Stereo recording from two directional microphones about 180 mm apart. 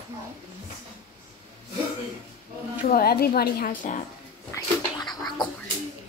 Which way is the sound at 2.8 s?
55° left (ahead or behind).